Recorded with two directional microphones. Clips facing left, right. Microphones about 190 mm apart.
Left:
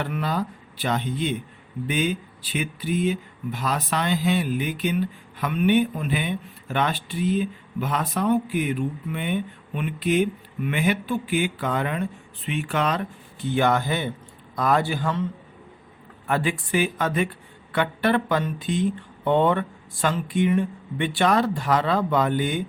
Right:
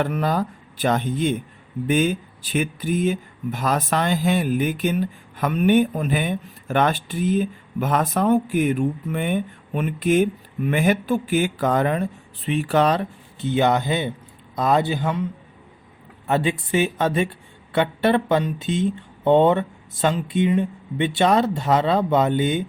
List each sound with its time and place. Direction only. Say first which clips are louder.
0.0 s speech: right 4 dB; 45° right (ahead or behind)
13.4 s speech: right 2 dB; 20° right (ahead or behind)